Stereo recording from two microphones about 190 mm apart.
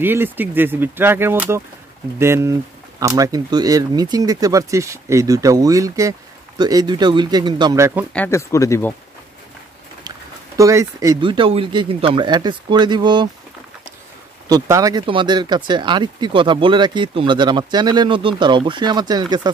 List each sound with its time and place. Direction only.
0.0 s speech: 10° right (ahead or behind)
8.1 s speech: 10° left (ahead or behind)
10.6 s speech: 15° right (ahead or behind)
14.5 s speech: 20° right (ahead or behind)